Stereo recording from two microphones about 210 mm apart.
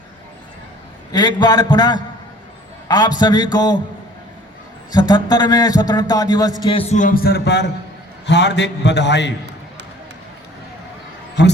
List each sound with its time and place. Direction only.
1.1 s a man's voice: 20° left (ahead or behind)
4.9 s a man's voice: 20° left (ahead or behind); by 9.3 s 55° left (ahead or behind)
11.4 s a man's voice: 55° left (ahead or behind)